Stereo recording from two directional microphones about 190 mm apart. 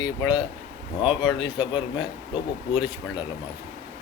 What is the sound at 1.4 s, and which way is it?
Speech, 25° left (ahead or behind).